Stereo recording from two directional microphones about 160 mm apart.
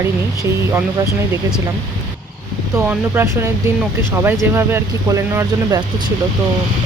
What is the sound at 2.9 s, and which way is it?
Speech, 15° right (ahead or behind).